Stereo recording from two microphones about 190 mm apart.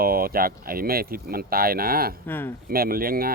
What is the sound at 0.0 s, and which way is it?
Speech, 50° right (ahead or behind).